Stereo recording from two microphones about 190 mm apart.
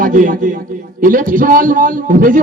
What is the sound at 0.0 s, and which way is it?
A man's voice, 45° right (ahead or behind).